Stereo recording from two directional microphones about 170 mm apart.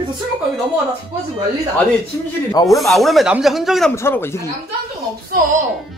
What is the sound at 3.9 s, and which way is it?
Speech, 15° left (ahead or behind).